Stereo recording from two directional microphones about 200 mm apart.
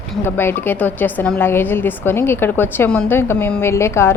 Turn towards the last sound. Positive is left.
turn(degrees=15)  # may be behind; listen again after turning